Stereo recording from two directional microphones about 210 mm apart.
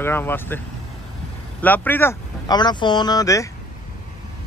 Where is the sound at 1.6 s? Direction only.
10° left (ahead or behind).